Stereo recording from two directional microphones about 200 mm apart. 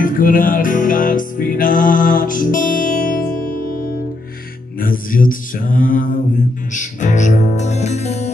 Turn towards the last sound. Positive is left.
turn(degrees=35)  # may be behind; listen again after turning